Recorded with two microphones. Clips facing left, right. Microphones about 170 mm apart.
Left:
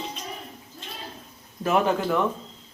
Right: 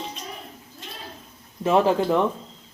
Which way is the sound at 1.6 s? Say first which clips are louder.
Right 3 dB; 30° right (ahead or behind).